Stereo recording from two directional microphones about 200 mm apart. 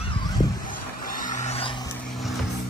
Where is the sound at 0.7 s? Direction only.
40° left (ahead or behind); by 1.9 s 25° left (ahead or behind).